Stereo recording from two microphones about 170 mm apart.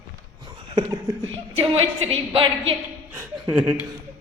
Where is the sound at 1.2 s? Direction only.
35° right (ahead or behind).